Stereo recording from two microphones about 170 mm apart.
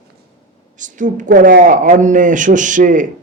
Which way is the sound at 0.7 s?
50° right (ahead or behind).